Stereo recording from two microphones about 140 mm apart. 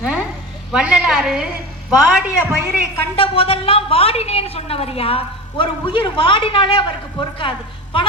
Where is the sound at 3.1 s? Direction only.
40° left (ahead or behind).